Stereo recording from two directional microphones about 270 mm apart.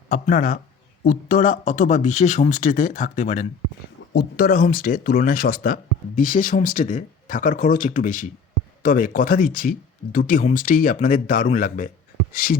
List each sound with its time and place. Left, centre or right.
0.1 s speech: left